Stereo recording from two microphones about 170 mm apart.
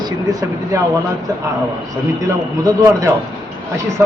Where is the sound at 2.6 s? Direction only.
20° right (ahead or behind).